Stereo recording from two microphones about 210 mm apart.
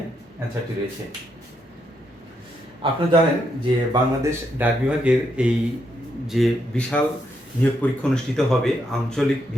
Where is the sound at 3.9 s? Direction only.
10° right (ahead or behind).